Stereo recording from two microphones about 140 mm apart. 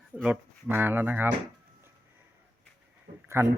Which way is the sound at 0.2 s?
10° right (ahead or behind).